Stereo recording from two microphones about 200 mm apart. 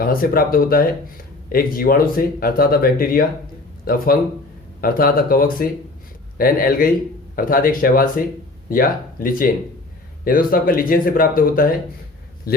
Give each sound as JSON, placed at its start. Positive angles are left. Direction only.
{"t": 0.0, "sound": "speech", "side_deg": 45}